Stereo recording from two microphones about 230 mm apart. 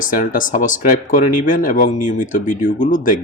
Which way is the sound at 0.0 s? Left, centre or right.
Left.